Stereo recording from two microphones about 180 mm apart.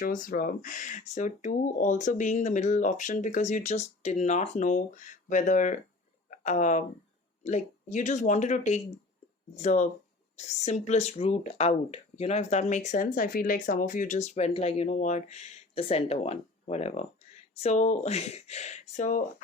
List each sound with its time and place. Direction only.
0.0 s speech: 50° left (ahead or behind)